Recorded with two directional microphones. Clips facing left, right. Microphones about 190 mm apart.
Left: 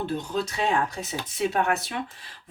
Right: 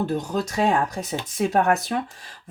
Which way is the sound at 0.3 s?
45° right (ahead or behind).